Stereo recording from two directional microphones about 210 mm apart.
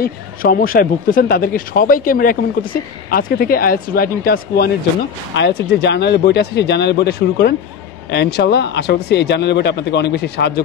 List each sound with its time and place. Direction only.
0.0 s speech: 45° left (ahead or behind)